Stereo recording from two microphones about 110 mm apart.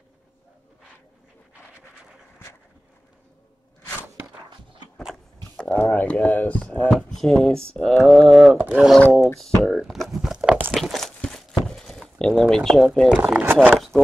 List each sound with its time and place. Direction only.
5.6 s speech: 10° left (ahead or behind)
6.9 s speech: centre (ahead or behind)
8.5 s speech: 15° right (ahead or behind)
9.4 s tearing: 5° left (ahead or behind)
10.7 s a sound: centre (ahead or behind)
12.2 s speech: 5° left (ahead or behind)
13.2 s speech: 15° right (ahead or behind)
13.7 s speech: centre (ahead or behind)